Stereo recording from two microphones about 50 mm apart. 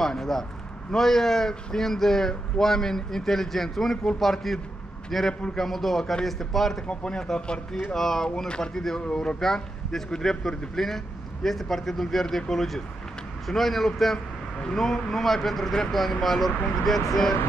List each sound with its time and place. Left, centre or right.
0.0 s speech: centre
6.9 s speech: centre